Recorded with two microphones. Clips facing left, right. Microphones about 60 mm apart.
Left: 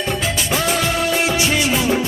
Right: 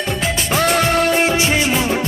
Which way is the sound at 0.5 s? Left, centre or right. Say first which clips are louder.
Right 5 dB; right.